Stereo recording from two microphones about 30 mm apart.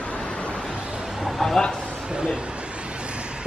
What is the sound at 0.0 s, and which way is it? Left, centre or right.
Vehicle, left.